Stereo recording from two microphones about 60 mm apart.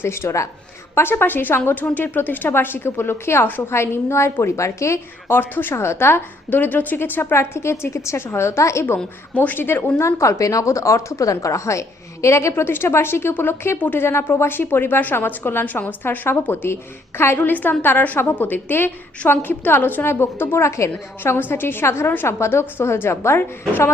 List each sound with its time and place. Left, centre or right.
0.0 s a woman's voice: left
0.9 s a woman's voice: left
5.3 s a woman's voice: left
5.7 s a woman's voice: left
7.3 s a woman's voice: left
9.3 s speech: left
9.6 s a woman's voice: left
10.0 s a woman's voice: left
13.7 s speech: left
14.0 s a woman's voice: left
15.6 s a woman's voice: left
21.3 s a woman's voice: left